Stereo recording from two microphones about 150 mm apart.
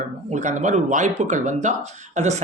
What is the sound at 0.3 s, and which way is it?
Speech, 55° right (ahead or behind).